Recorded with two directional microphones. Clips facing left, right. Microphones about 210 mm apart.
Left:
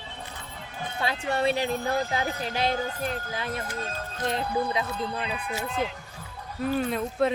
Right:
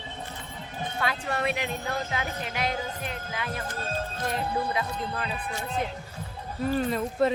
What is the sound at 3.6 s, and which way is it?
Speech, 30° right (ahead or behind).